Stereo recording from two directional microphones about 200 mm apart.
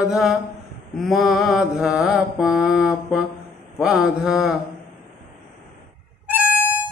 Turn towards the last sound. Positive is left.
turn(degrees=-10)  # may be behind; listen again after turning